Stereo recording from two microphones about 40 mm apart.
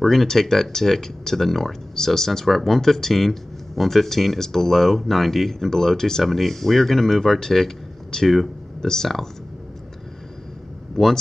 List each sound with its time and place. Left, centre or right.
0.0 s speech: centre
11.0 s speech: centre